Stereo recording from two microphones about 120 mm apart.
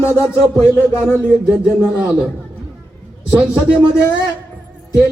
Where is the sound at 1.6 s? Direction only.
10° right (ahead or behind).